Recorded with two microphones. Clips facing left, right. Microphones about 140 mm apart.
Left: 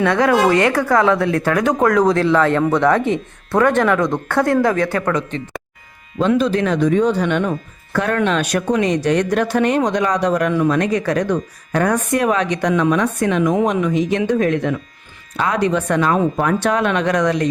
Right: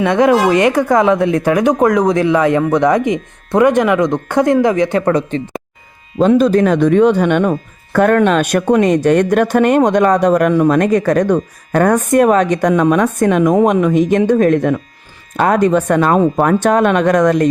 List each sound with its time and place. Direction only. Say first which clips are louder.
0.0 s speech: right 3 dB; 20° right (ahead or behind)
6.1 s speech: right 6 dB; 45° right (ahead or behind)